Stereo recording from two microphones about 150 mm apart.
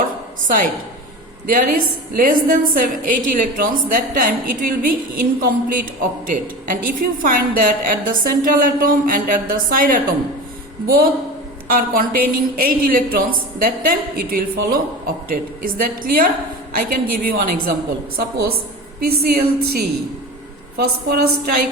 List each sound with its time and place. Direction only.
1.5 s a woman's voice: 70° right (ahead or behind)
10.8 s a woman's voice: 90° right
11.7 s a woman's voice: 75° right (ahead or behind)
18.9 s a woman's voice: 90° right